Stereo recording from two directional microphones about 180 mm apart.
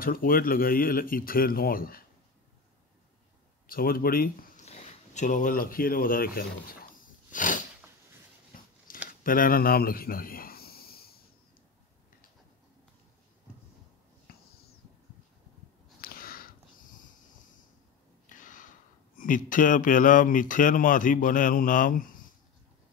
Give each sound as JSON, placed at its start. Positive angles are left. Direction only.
{"t": 0.0, "sound": "speech", "side_deg": 50}
{"t": 3.6, "sound": "speech", "side_deg": 55}
{"t": 4.6, "sound": "speech", "side_deg": 40}
{"t": 8.5, "sound": "scissors", "side_deg": 50}
{"t": 8.9, "sound": "a sound", "side_deg": 50}
{"t": 16.0, "sound": "sniff", "side_deg": 55}
{"t": 18.3, "sound": "a sound", "side_deg": 45}
{"t": 19.1, "sound": "speech", "side_deg": 50}